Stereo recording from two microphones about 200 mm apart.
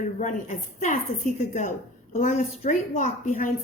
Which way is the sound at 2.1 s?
40° left (ahead or behind).